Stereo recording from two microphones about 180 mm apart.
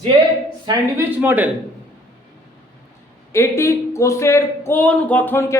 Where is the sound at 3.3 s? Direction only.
15° left (ahead or behind).